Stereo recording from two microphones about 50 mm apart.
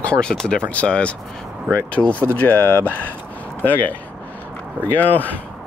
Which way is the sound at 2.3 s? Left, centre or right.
Left.